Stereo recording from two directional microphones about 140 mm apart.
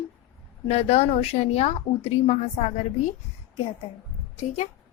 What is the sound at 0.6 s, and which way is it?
Speech, 50° left (ahead or behind).